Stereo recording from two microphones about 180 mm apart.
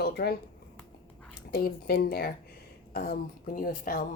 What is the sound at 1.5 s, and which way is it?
A woman's voice, 60° left (ahead or behind).